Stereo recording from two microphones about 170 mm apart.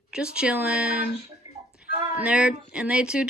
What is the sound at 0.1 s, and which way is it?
Speech, 5° right (ahead or behind).